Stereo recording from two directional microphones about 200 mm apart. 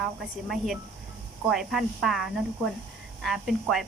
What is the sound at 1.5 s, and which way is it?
Speech, centre (ahead or behind).